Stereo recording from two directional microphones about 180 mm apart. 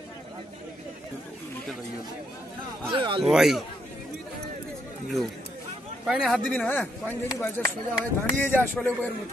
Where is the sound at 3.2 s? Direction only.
Centre (ahead or behind).